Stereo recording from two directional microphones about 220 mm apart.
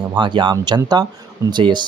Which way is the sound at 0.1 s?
20° right (ahead or behind).